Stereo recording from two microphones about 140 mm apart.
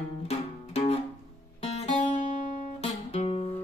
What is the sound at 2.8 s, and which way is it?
Music, 45° left (ahead or behind).